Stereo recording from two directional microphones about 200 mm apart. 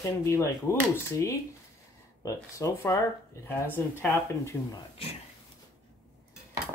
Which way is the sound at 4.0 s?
10° left (ahead or behind).